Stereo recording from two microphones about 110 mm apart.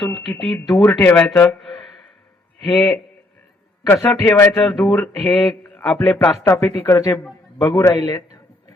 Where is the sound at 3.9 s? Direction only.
15° left (ahead or behind).